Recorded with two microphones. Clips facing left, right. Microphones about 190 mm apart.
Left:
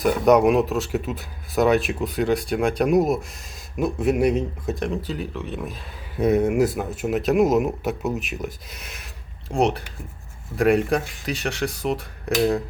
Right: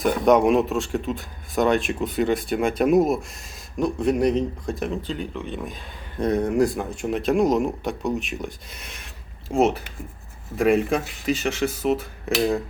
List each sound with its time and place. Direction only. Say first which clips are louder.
0.0 s speech: left 1 dB; centre (ahead or behind)